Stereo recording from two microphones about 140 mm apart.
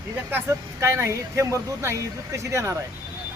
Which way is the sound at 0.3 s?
15° right (ahead or behind).